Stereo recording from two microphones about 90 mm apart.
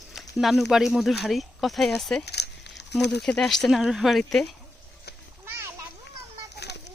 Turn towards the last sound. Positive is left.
turn(degrees=-30)  # may be behind; listen again after turning